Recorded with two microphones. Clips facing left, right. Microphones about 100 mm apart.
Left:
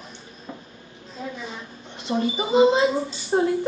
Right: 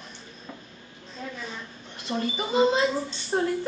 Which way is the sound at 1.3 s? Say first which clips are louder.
Left 2 dB; 10° left (ahead or behind).